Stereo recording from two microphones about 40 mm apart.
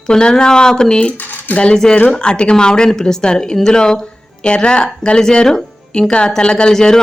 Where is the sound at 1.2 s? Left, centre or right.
Left.